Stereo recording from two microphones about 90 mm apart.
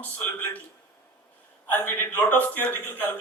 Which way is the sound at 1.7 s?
20° left (ahead or behind).